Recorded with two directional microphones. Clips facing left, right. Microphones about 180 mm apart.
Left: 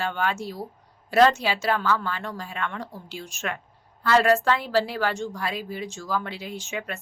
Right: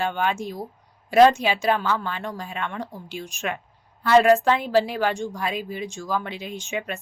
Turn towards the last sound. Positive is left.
turn(degrees=-15)  # may be behind; listen again after turning